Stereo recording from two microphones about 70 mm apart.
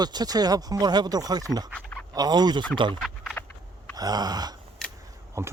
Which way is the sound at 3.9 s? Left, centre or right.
Right.